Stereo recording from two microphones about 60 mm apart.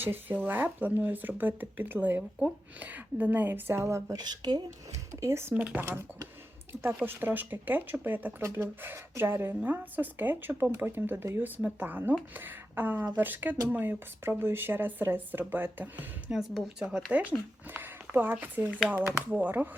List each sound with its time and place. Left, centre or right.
0.0 s speech: right
5.2 s speech: right
5.5 s speech: right
6.8 s speech: right
8.4 s speech: right
9.6 s speech: right
16.3 s speech: centre
17.7 s speech: right